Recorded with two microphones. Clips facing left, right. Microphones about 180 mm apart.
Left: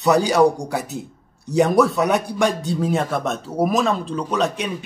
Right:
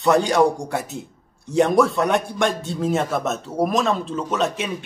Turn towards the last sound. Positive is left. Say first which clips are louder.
# left 1 dB
turn(degrees=0)  # may be behind; listen again after turning